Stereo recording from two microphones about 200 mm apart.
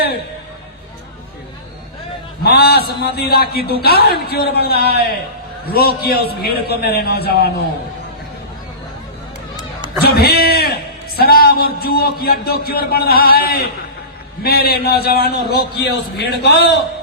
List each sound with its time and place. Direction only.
2.4 s a sound: 50° left (ahead or behind)
3.2 s a man's voice: 50° left (ahead or behind)
10.0 s a man's voice: 50° left (ahead or behind)